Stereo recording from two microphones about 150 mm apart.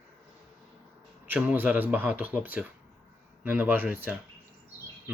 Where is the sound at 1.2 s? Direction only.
10° right (ahead or behind).